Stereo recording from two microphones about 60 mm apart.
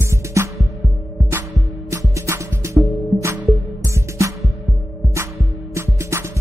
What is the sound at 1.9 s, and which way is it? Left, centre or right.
Music, right.